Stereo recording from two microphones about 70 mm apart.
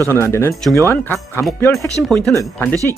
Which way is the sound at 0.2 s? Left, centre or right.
Left.